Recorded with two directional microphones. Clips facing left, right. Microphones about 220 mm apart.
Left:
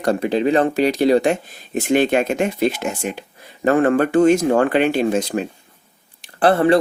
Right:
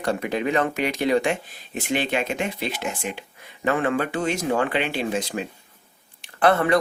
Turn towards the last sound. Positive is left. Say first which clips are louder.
# left 5 dB
turn(degrees=30)  # may be behind; listen again after turning